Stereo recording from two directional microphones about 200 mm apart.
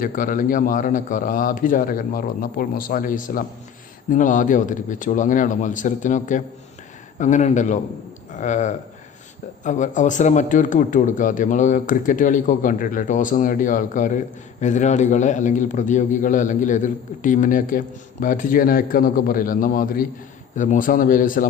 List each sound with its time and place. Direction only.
0.0 s a man's voice: 45° left (ahead or behind)